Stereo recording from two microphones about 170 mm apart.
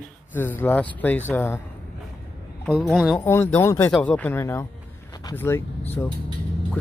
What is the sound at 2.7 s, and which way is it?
Speech, 5° left (ahead or behind).